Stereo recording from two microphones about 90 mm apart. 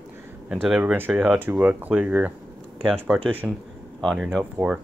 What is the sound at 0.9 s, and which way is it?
Speech, 20° right (ahead or behind).